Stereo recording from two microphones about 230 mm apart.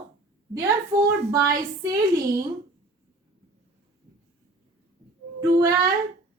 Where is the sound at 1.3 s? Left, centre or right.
Centre.